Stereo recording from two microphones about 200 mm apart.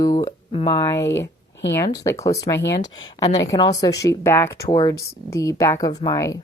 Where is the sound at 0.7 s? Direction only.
15° left (ahead or behind).